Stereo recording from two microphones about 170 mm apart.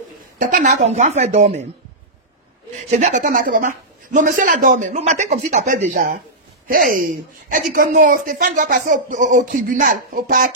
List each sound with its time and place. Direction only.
0.4 s a woman's voice: 50° right (ahead or behind)
2.9 s speech: 45° right (ahead or behind)
5.9 s speech: 55° right (ahead or behind)